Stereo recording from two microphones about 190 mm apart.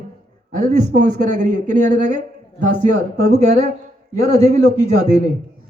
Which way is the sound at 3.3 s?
35° right (ahead or behind).